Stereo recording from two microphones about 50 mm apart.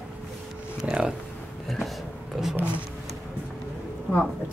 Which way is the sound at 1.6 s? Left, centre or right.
Centre.